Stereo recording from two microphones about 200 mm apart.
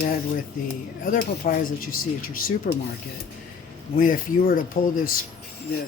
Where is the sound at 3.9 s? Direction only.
45° left (ahead or behind).